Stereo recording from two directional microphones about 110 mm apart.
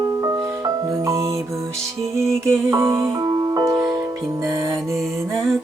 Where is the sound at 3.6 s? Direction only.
30° right (ahead or behind).